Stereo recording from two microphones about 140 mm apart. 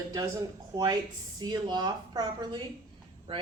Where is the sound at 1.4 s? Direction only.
30° right (ahead or behind).